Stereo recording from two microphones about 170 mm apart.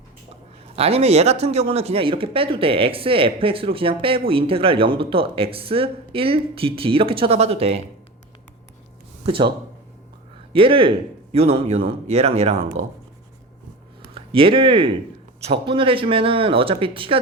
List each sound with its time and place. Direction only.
0.8 s speech: 35° right (ahead or behind)
9.2 s speech: 30° right (ahead or behind)
10.5 s speech: 30° right (ahead or behind)
14.1 s speech: 30° right (ahead or behind)